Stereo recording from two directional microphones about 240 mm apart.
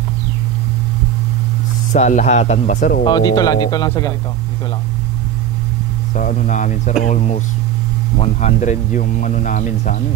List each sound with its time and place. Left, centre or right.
1.9 s speech: left
3.1 s speech: centre
6.1 s a man's voice: left